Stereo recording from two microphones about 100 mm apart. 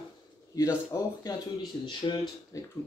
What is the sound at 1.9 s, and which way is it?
Speech, 50° left (ahead or behind).